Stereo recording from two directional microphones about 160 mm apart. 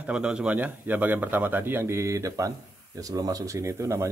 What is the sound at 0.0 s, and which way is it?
A man's voice, 5° right (ahead or behind).